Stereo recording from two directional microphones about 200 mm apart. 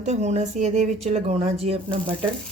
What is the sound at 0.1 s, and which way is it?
A woman's voice, 35° right (ahead or behind).